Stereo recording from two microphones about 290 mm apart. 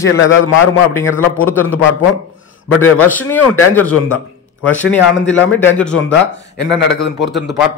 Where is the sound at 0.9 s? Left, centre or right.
Centre.